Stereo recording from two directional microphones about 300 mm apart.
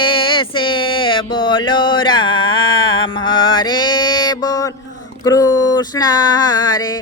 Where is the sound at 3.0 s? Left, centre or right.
Centre.